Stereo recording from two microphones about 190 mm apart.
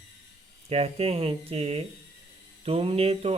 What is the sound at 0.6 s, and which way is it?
Mantra, 35° right (ahead or behind).